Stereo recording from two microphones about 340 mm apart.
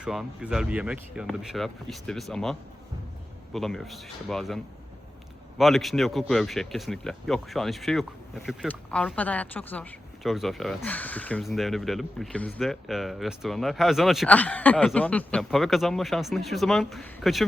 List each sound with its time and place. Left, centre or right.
0.0 s speech: centre